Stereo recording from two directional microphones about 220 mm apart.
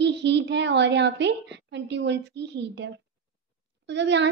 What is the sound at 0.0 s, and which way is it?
A woman's voice, 50° right (ahead or behind).